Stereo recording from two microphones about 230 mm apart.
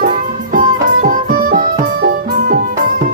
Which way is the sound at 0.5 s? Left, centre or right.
Right.